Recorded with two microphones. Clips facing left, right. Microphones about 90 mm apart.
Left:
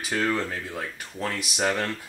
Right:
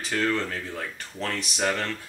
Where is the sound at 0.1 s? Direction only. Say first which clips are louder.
Even; 10° left (ahead or behind).